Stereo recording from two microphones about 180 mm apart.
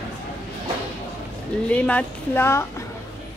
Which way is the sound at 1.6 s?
5° left (ahead or behind).